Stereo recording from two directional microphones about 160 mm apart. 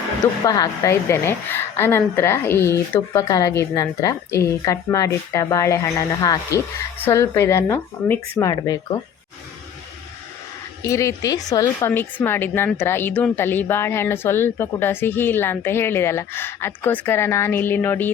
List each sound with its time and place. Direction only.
0.4 s a woman's voice: 20° left (ahead or behind)
10.8 s a woman's voice: 20° left (ahead or behind)